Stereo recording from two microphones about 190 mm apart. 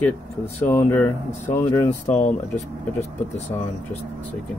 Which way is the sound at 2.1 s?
40° left (ahead or behind).